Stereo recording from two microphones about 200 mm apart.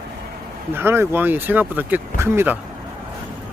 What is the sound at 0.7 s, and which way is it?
Speech, 10° right (ahead or behind).